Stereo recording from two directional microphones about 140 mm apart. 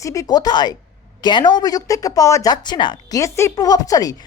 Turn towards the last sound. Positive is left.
turn(degrees=25)  # may be behind; listen again after turning